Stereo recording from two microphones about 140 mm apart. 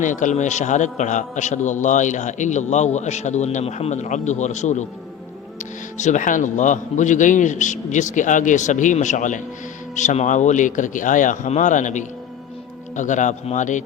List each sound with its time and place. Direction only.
0.0 s a man's voice: 65° left (ahead or behind)